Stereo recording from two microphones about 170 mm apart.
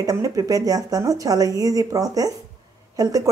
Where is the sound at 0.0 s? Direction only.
20° right (ahead or behind).